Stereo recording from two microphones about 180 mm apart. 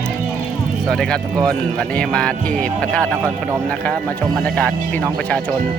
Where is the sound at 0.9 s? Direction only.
5° left (ahead or behind).